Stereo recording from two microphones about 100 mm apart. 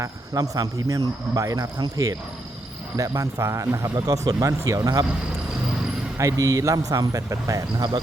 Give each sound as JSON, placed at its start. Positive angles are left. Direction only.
{"t": 0.0, "sound": "a man's voice", "side_deg": -35}
{"t": 6.1, "sound": "a man's voice", "side_deg": -35}